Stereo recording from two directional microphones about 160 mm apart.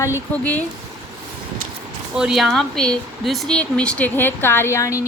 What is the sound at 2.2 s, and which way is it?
Speech, centre (ahead or behind).